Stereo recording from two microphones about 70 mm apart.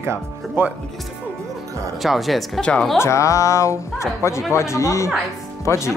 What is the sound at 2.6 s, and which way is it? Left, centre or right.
Speech, centre.